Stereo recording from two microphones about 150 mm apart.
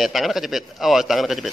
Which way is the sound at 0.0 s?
Centre (ahead or behind).